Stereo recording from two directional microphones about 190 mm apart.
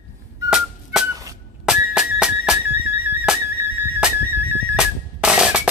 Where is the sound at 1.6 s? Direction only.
5° right (ahead or behind).